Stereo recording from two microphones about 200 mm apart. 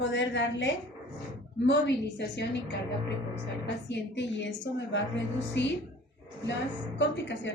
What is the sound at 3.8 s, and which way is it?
A woman's voice, 65° left (ahead or behind).